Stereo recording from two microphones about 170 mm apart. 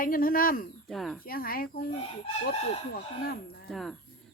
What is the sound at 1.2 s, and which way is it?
Speech, 60° left (ahead or behind).